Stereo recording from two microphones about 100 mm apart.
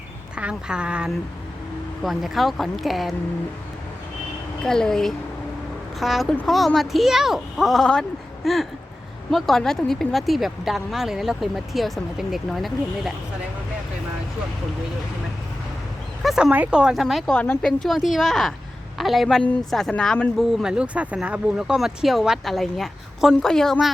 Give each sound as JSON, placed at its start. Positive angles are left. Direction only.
{"t": 0.3, "sound": "speech", "side_deg": -10}
{"t": 4.6, "sound": "speech", "side_deg": 5}
{"t": 16.2, "sound": "speech", "side_deg": -5}
{"t": 17.3, "sound": "speech", "side_deg": 20}
{"t": 17.6, "sound": "speech", "side_deg": 5}
{"t": 20.5, "sound": "speech", "side_deg": -5}